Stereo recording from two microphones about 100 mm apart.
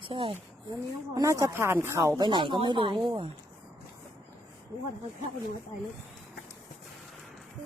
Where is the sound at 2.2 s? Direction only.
50° right (ahead or behind).